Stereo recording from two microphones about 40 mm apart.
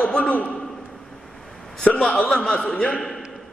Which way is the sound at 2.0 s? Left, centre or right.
Left.